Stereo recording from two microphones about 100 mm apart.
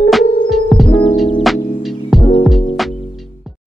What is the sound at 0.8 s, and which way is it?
Music, 65° left (ahead or behind).